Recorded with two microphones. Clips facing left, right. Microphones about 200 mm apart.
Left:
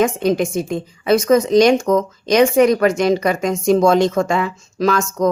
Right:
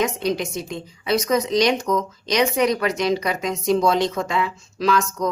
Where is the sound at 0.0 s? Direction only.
50° left (ahead or behind).